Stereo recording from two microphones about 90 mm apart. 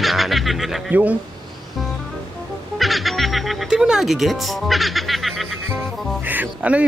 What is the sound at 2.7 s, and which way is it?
Music, centre (ahead or behind).